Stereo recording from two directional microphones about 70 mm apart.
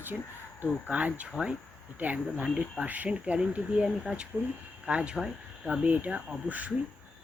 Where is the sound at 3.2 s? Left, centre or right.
Centre.